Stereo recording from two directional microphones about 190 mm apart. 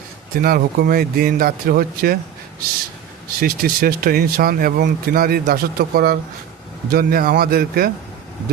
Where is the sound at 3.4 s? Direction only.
50° right (ahead or behind).